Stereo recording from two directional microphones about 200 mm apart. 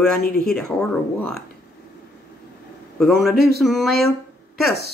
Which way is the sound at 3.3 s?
50° right (ahead or behind).